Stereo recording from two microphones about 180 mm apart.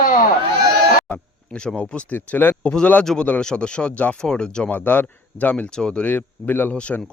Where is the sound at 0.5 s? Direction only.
65° right (ahead or behind).